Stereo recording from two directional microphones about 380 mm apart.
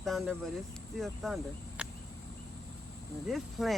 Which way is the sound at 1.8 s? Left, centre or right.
Centre.